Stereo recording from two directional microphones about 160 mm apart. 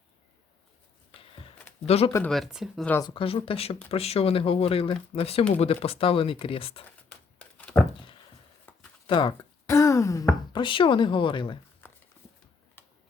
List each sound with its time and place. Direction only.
1.9 s speech: 40° left (ahead or behind)
2.3 s speech: centre (ahead or behind)
3.0 s speech: 30° left (ahead or behind)
7.6 s a sound: 5° left (ahead or behind)
9.0 s speech: 30° left (ahead or behind)
9.6 s a sound: 20° left (ahead or behind)
10.5 s speech: 30° left (ahead or behind)